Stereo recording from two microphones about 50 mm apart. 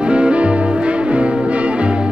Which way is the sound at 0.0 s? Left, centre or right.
Centre.